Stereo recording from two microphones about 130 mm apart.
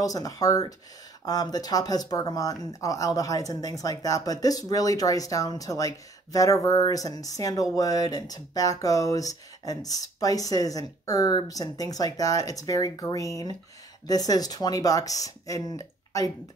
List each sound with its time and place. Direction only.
0.0 s speech: 30° left (ahead or behind)